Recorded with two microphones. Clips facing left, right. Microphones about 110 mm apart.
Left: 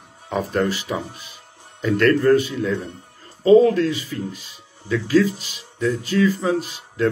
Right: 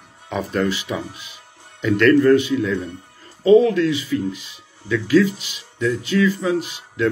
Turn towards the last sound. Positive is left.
turn(degrees=40)  # may be behind; listen again after turning